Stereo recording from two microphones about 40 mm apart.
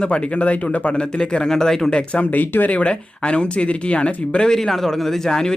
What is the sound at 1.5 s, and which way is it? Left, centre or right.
Speech, centre.